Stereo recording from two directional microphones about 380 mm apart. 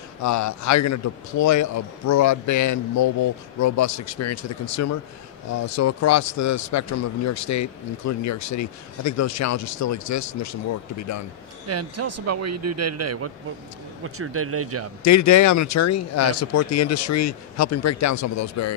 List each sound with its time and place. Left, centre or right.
0.2 s a man's voice: left
11.6 s speech: right
15.0 s a man's voice: left